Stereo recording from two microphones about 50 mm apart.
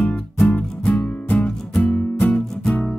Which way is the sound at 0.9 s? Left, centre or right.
Left.